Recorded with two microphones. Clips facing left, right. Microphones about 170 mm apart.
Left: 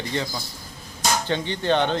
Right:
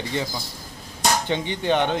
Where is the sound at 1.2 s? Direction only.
15° right (ahead or behind).